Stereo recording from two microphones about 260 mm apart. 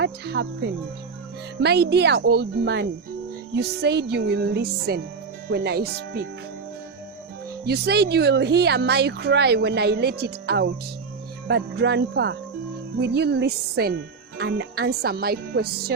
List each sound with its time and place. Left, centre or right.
0.0 s speech: right
1.6 s speech: right
7.6 s speech: right